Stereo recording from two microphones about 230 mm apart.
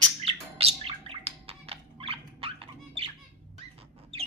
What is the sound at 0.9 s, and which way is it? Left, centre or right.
Gargling, right.